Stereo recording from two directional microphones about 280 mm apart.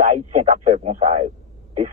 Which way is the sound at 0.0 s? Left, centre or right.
Right.